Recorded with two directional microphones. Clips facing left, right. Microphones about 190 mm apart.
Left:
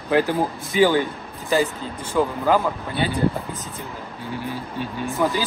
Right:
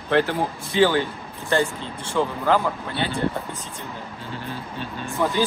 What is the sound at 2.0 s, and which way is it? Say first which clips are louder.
Speech: left 2 dB; 10° left (ahead or behind).